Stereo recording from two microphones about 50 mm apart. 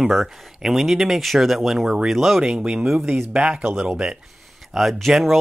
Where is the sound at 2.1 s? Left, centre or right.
Centre.